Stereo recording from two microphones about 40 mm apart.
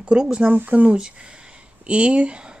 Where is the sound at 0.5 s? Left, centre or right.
Right.